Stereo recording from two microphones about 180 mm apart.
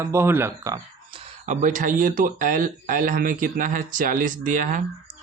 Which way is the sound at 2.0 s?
50° right (ahead or behind).